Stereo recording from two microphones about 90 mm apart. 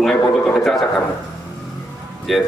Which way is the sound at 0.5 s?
5° left (ahead or behind).